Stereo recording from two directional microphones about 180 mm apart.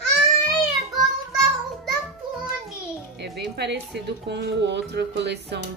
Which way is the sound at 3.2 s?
70° right (ahead or behind).